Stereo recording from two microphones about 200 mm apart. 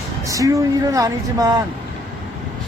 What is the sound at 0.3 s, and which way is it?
Speech, 15° right (ahead or behind).